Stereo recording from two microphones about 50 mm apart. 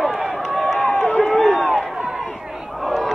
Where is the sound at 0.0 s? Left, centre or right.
Centre.